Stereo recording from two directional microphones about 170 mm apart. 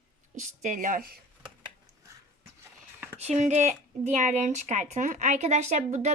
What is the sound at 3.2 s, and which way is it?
Speech, 40° right (ahead or behind).